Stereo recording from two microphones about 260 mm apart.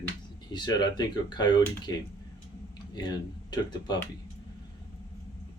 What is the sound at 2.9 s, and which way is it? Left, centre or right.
Speech, centre.